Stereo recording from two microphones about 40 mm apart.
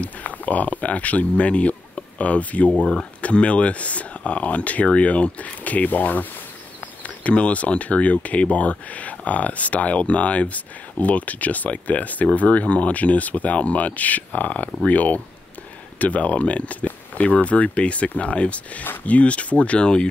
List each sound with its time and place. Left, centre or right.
0.0 s speech: left
2.7 s speech: left
3.2 s speech: left